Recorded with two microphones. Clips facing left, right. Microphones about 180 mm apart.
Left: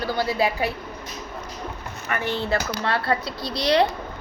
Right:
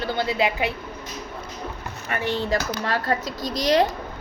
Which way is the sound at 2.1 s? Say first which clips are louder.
Even; 35° right (ahead or behind).